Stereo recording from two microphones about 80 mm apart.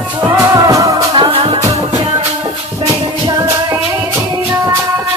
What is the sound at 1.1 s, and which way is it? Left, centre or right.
Music, right.